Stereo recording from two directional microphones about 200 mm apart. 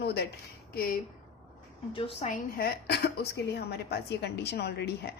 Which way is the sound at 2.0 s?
30° left (ahead or behind).